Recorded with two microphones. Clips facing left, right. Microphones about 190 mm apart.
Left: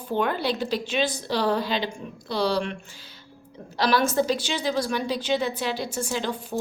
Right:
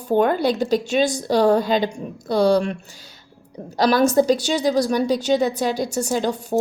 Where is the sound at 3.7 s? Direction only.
40° right (ahead or behind).